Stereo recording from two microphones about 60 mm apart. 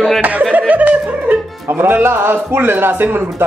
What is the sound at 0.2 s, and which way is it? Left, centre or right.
Speech, right.